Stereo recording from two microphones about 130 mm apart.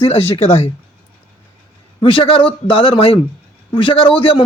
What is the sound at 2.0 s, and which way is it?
Speech, 40° left (ahead or behind).